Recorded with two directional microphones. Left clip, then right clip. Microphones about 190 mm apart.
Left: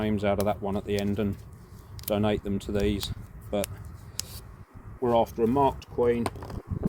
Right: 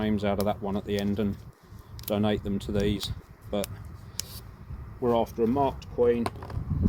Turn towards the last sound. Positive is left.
turn(degrees=65)  # may be behind; listen again after turning